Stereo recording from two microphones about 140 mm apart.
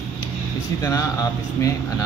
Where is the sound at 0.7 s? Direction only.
20° left (ahead or behind).